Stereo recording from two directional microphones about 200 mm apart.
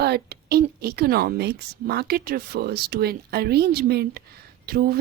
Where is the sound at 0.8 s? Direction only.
50° right (ahead or behind).